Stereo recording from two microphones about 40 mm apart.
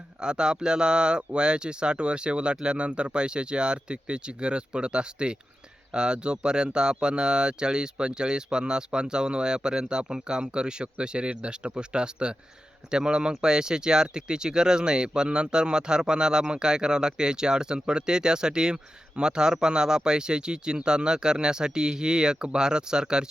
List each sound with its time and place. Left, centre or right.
0.2 s speech: right